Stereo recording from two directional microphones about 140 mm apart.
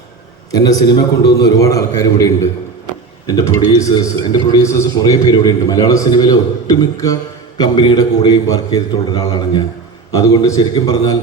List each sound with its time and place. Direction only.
0.5 s a man's voice: 25° left (ahead or behind)